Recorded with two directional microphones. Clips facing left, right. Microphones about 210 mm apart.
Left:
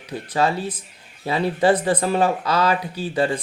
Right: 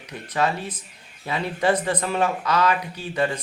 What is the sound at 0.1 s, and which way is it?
Speech, 30° left (ahead or behind).